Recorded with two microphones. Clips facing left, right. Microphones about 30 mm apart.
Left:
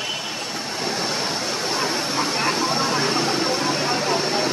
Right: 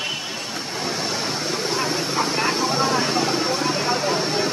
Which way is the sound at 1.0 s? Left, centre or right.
Centre.